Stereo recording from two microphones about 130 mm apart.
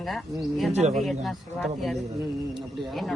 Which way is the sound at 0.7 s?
60° right (ahead or behind).